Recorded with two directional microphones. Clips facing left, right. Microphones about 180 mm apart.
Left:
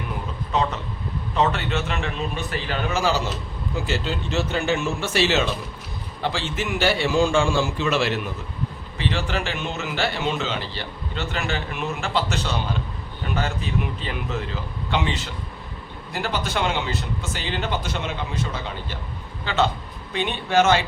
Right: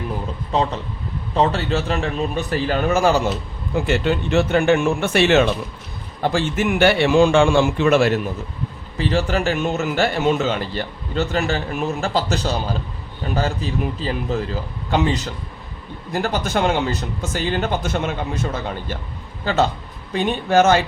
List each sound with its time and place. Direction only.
0.5 s a man's voice: 30° right (ahead or behind)